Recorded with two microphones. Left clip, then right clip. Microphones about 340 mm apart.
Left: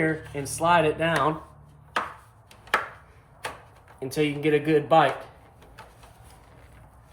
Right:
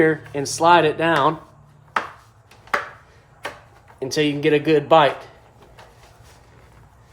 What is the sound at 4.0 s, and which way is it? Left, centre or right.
Speech, right.